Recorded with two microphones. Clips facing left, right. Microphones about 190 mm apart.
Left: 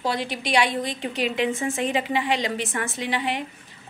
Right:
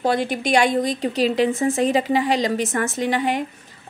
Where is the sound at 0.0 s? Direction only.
50° right (ahead or behind).